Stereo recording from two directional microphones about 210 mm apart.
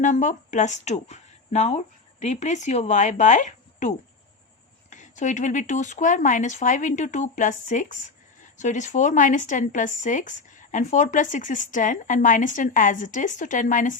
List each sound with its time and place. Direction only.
0.0 s speech: 35° left (ahead or behind)